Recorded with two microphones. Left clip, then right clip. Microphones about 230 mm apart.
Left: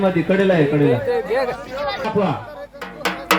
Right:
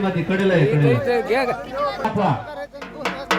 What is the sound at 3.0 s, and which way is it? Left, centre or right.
Music, left.